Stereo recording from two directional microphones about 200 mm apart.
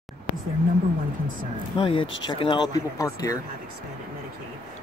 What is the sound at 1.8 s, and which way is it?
Speech, 25° left (ahead or behind).